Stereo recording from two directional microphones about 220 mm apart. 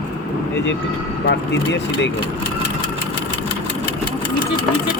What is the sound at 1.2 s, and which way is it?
Speech, 50° left (ahead or behind).